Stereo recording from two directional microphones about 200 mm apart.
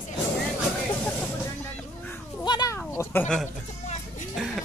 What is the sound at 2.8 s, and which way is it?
Speech, 10° left (ahead or behind).